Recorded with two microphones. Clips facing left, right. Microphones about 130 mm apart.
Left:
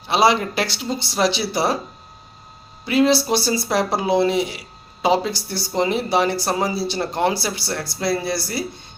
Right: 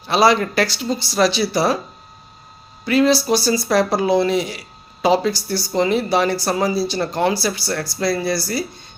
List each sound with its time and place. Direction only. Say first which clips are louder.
0.1 s speech: right 2 dB; 20° left (ahead or behind)
2.8 s speech: right 1 dB; 20° left (ahead or behind)